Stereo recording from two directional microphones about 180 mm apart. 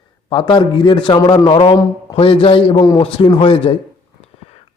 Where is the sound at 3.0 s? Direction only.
30° left (ahead or behind).